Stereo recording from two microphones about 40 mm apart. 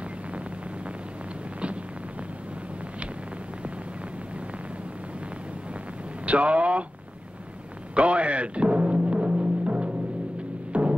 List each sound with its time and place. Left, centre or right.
6.2 s speech: right
7.9 s timpani: right
10.7 s music: right